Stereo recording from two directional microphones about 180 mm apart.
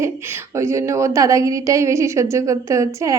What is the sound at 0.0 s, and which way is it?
A woman's voice, 15° right (ahead or behind).